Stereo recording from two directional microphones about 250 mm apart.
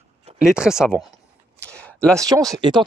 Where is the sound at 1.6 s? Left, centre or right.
Centre.